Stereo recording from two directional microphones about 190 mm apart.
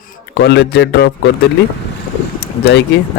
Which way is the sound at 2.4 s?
60° left (ahead or behind).